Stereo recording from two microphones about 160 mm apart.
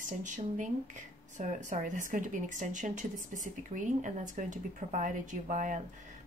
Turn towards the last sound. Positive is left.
turn(degrees=-50)  # may be behind; listen again after turning